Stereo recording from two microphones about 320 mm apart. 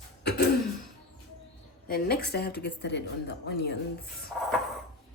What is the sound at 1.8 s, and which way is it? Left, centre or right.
Speech, left.